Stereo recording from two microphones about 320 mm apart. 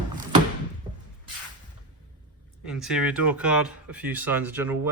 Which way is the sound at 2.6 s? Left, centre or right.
Centre.